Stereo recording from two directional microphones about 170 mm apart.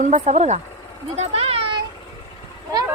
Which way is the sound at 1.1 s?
40° right (ahead or behind).